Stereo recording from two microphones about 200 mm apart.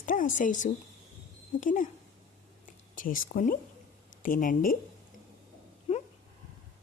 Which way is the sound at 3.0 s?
45° left (ahead or behind).